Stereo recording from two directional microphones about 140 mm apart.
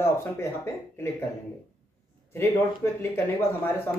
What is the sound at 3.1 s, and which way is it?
Speech, 15° left (ahead or behind).